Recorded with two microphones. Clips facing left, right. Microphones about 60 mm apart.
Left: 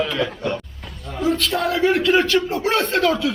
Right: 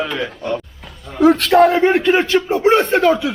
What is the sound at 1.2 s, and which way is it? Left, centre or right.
Speech, right.